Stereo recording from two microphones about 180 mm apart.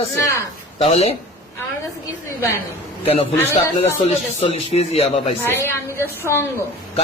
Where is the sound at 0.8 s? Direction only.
35° left (ahead or behind).